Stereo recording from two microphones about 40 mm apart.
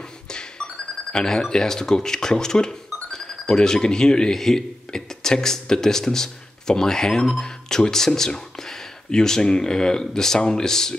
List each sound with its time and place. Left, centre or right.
0.3 s beatboxing: centre
1.2 s speech: centre